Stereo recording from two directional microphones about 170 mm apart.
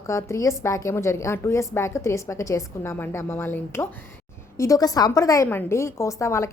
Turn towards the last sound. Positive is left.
turn(degrees=15)  # may be behind; listen again after turning